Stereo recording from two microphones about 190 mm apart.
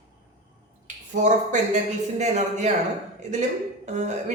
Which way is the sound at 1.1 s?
40° right (ahead or behind).